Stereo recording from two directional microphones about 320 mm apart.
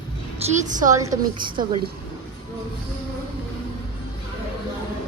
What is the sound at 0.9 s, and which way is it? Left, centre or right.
Speech, centre.